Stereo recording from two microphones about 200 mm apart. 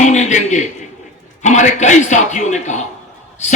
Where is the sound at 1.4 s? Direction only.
35° left (ahead or behind).